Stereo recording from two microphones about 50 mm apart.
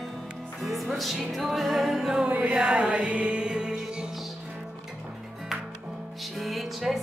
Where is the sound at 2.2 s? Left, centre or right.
Right.